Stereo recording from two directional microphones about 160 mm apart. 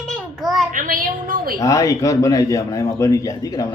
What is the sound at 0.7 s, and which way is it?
Speech, 60° right (ahead or behind).